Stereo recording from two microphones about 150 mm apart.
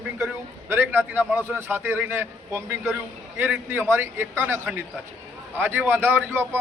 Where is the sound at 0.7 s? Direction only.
15° right (ahead or behind).